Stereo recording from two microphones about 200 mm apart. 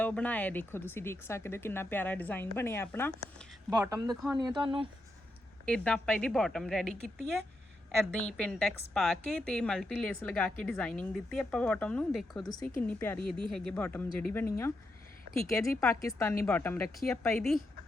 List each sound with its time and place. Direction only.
0.0 s speech: 5° left (ahead or behind)
3.7 s speech: 15° right (ahead or behind)
4.1 s speech: centre (ahead or behind)
4.4 s speech: 25° right (ahead or behind)
5.6 s speech: 5° left (ahead or behind)
15.6 s speech: 10° left (ahead or behind)